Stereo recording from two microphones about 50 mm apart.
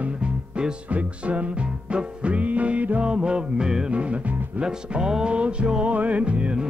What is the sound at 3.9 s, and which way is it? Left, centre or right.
Music, right.